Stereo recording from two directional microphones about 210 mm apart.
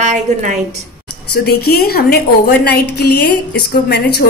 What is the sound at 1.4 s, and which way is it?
A woman's voice, 45° left (ahead or behind).